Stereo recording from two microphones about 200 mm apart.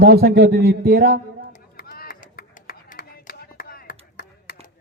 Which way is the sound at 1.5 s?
45° left (ahead or behind).